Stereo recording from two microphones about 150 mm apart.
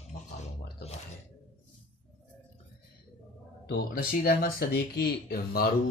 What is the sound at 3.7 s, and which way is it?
Speech, 75° left (ahead or behind).